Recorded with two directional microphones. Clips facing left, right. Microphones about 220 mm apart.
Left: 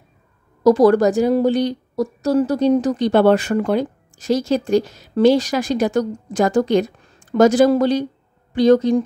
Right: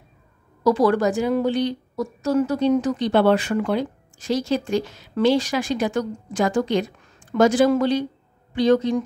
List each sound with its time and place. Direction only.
0.7 s a woman's voice: 40° left (ahead or behind)